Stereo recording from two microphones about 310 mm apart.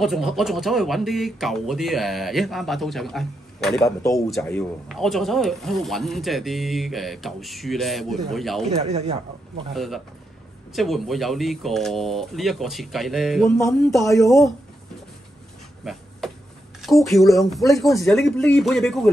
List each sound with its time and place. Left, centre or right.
0.0 s speech: centre
8.6 s speech: centre
9.8 s speech: centre
15.8 s a sound: centre
16.8 s speech: centre